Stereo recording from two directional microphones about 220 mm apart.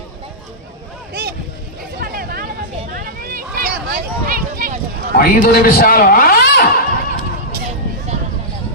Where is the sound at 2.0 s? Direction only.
45° right (ahead or behind).